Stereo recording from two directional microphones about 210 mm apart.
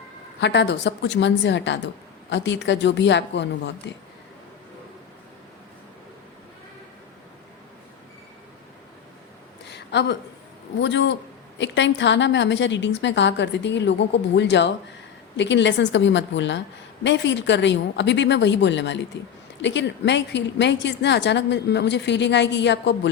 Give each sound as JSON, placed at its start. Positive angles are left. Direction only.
{"t": 0.3, "sound": "a woman's voice", "side_deg": 55}
{"t": 9.6, "sound": "a sound", "side_deg": 55}
{"t": 10.8, "sound": "a woman's voice", "side_deg": 60}